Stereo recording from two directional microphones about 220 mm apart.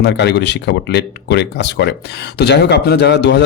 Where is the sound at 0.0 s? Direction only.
50° left (ahead or behind).